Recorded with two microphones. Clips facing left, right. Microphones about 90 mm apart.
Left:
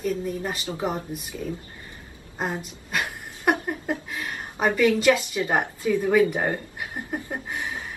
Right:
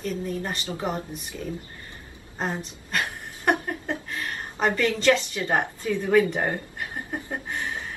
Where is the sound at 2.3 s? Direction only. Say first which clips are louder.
Left 1 dB; 10° left (ahead or behind).